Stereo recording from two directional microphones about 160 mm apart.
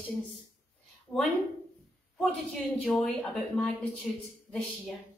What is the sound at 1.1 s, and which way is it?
Speech, 20° left (ahead or behind).